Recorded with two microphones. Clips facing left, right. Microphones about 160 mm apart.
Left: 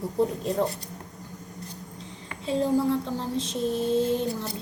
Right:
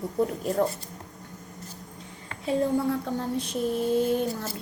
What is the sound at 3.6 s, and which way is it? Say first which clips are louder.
Speech: even; 25° left (ahead or behind).